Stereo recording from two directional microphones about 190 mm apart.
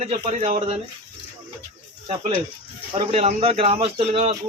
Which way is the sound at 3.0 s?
30° right (ahead or behind).